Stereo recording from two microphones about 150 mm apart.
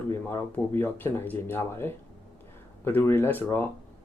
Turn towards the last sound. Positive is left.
turn(degrees=15)  # may be behind; listen again after turning